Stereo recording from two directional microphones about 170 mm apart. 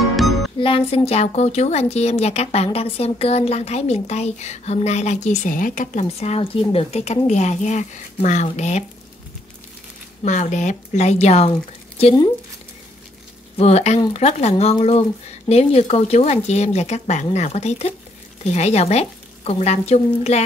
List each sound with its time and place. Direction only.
0.6 s a woman's voice: 30° left (ahead or behind)
10.2 s a woman's voice: 45° left (ahead or behind)
13.6 s a woman's voice: 40° left (ahead or behind)